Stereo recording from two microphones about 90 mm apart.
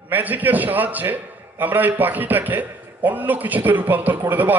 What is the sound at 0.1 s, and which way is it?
A man's voice, 20° right (ahead or behind).